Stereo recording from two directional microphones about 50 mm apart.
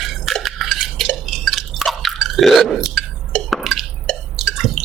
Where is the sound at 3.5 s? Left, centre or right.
Centre.